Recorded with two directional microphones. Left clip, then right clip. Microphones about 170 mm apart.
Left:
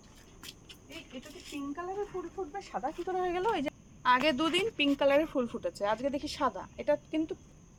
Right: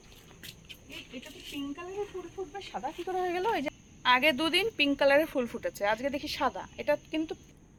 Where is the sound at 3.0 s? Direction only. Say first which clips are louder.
Right 1 dB; 5° right (ahead or behind).